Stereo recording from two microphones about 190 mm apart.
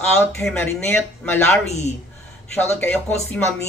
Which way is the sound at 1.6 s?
35° left (ahead or behind).